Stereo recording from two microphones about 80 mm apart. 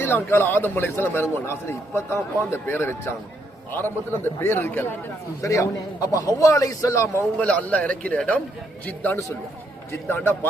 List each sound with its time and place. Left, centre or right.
0.0 s a man's voice: left
4.1 s a man's voice: left
5.4 s a man's voice: left
7.3 s a man's voice: centre